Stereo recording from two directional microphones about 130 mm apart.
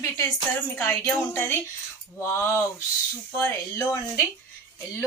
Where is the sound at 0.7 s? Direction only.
15° left (ahead or behind).